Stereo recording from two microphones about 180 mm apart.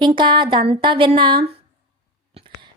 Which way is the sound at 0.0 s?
25° right (ahead or behind).